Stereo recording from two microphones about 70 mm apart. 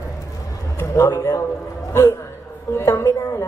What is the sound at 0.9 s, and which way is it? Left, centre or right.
A woman's voice, left.